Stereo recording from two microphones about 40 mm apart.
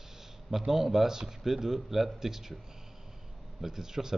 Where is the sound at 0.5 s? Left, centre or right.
Centre.